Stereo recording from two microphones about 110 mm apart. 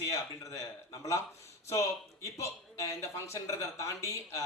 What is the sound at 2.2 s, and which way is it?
A man's voice, 25° left (ahead or behind).